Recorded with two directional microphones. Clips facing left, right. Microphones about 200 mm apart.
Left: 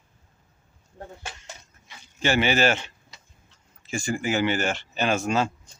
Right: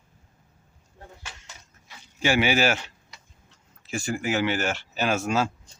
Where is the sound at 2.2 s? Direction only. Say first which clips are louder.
Even; 10° right (ahead or behind).